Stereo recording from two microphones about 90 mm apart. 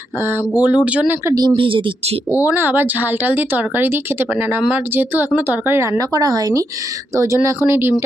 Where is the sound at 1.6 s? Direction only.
70° right (ahead or behind).